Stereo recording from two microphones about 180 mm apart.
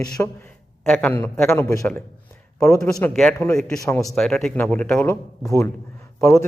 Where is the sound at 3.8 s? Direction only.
15° left (ahead or behind).